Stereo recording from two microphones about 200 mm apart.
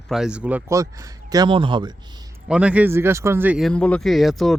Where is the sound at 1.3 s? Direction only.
20° right (ahead or behind).